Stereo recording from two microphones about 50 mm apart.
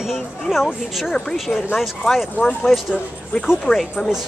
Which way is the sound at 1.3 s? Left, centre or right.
Centre.